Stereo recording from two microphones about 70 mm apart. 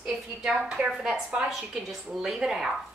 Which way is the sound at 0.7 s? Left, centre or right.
Centre.